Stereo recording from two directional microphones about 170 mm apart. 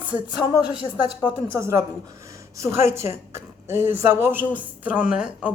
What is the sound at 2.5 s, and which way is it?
A woman's voice, 15° right (ahead or behind).